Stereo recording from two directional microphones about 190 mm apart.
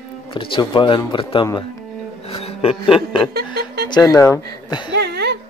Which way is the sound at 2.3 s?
30° left (ahead or behind).